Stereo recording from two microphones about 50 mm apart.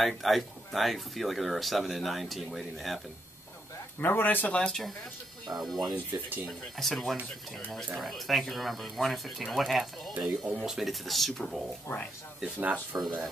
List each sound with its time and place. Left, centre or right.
0.2 s speech: centre
4.0 s speech: left
4.5 s speech: centre
5.5 s speech: centre
6.8 s speech: centre
10.1 s speech: right
10.5 s speech: centre
11.9 s speech: left
12.4 s speech: right
12.9 s speech: centre